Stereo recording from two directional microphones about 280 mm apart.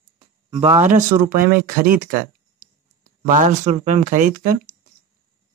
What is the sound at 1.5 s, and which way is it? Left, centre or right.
Speech, right.